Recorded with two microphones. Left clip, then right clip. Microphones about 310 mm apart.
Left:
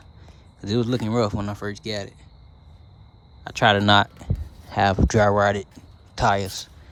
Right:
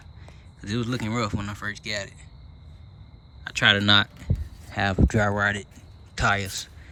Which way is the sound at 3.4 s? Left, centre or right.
Centre.